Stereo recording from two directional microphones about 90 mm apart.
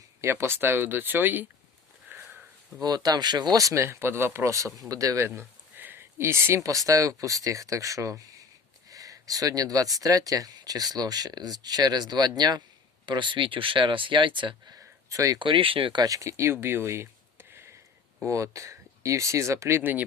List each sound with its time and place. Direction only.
0.2 s speech: 30° right (ahead or behind)
2.8 s speech: 45° right (ahead or behind)
3.8 s speech: 25° right (ahead or behind)
5.2 s speech: 25° right (ahead or behind); by 12.6 s 50° right (ahead or behind)
13.1 s speech: 60° right (ahead or behind)
14.7 s a sound: 35° right (ahead or behind)
15.4 s speech: 70° right (ahead or behind)
16.0 s speech: 40° right (ahead or behind)
19.8 s speech: 20° right (ahead or behind)